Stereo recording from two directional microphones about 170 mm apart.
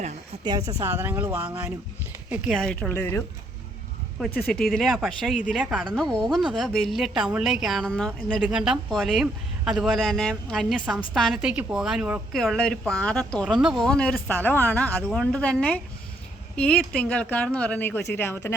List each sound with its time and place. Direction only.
0.4 s a woman's voice: 20° right (ahead or behind); by 3.2 s 10° left (ahead or behind)
4.6 s a woman's voice: centre (ahead or behind)
12.4 s a woman's voice: 5° left (ahead or behind)